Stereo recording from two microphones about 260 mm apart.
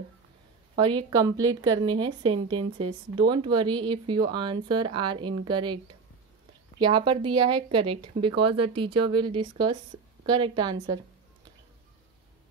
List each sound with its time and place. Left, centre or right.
0.7 s a woman's voice: centre
6.8 s a woman's voice: centre